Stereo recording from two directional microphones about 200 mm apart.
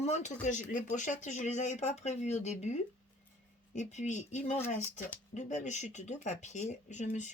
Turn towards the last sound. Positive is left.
turn(degrees=35)  # may be behind; listen again after turning